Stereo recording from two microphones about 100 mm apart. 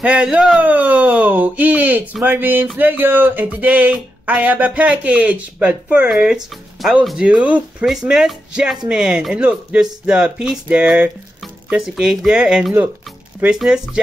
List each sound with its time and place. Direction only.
0.0 s speech: 10° right (ahead or behind)
2.2 s music: 20° right (ahead or behind)
2.8 s speech: 20° right (ahead or behind)